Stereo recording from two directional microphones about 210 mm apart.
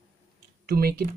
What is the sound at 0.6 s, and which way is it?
Speech, 45° right (ahead or behind).